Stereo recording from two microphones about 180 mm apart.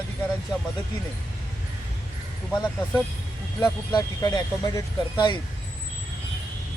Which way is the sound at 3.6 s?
20° left (ahead or behind).